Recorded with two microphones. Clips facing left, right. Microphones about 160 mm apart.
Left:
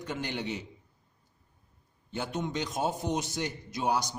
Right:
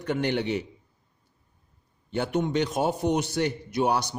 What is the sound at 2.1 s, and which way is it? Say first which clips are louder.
A man's voice: right 8 dB; 65° right (ahead or behind).